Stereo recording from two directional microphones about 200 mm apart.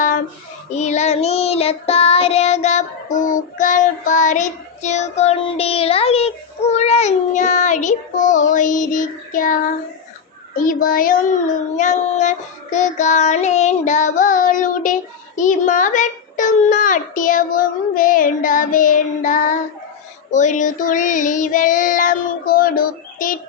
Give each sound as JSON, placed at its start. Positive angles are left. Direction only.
{"t": 0.7, "sound": "child singing", "side_deg": 35}
{"t": 10.6, "sound": "a child's voice", "side_deg": 45}